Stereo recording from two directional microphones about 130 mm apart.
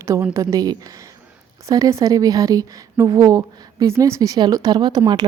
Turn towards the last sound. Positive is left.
turn(degrees=-35)  # may be behind; listen again after turning